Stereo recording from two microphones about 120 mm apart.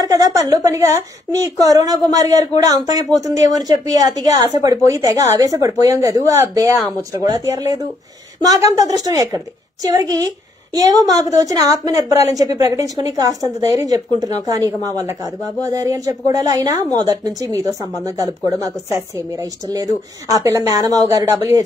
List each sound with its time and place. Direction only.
0.1 s a woman's voice: 30° right (ahead or behind)
10.7 s a woman's voice: 30° right (ahead or behind)